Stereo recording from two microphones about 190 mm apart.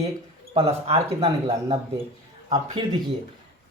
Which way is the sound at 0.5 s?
30° right (ahead or behind).